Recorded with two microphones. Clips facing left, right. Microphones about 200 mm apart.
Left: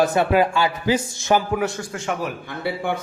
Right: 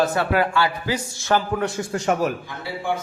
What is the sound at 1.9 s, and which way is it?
Speech, 45° right (ahead or behind).